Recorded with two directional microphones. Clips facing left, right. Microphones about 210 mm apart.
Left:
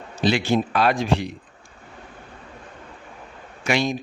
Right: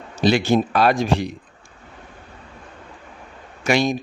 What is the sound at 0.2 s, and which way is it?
Speech, 45° right (ahead or behind).